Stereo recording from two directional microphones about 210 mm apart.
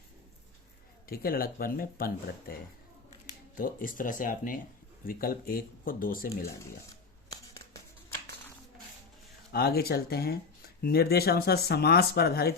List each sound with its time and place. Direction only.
1.0 s speech: 45° left (ahead or behind)
9.5 s speech: 50° left (ahead or behind)